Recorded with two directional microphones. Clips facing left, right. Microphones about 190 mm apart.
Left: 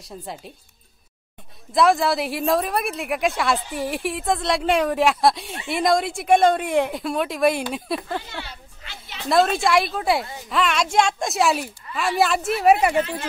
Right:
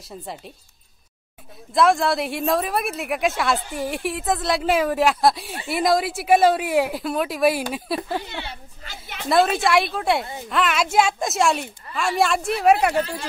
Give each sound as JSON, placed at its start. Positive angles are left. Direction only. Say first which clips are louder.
{"t": 0.2, "sound": "a woman's voice", "louder": "even", "side_deg": 0}
{"t": 1.7, "sound": "a woman's voice", "louder": "even", "side_deg": 0}
{"t": 8.8, "sound": "a sound", "louder": "right 2 dB", "side_deg": -50}
{"t": 9.3, "sound": "a woman's voice", "louder": "even", "side_deg": 0}